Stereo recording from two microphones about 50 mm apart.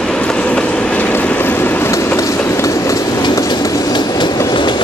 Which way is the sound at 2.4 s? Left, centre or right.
Left.